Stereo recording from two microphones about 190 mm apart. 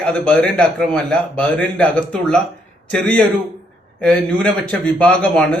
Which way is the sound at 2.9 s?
5° left (ahead or behind).